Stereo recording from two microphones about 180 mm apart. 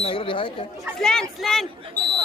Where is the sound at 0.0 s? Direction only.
30° left (ahead or behind).